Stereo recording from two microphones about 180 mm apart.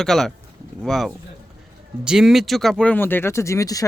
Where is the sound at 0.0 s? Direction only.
Centre (ahead or behind).